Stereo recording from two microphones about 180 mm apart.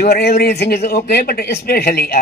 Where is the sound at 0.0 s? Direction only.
65° left (ahead or behind).